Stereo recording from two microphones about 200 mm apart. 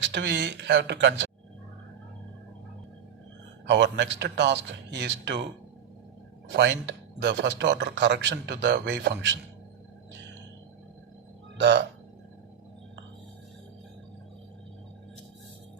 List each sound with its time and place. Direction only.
0.0 s speech: 60° right (ahead or behind)
3.7 s speech: 60° right (ahead or behind)
6.5 s speech: 60° right (ahead or behind)